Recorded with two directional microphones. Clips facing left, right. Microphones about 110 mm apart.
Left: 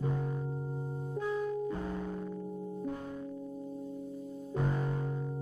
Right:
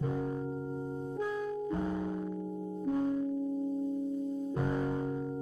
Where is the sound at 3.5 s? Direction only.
35° right (ahead or behind).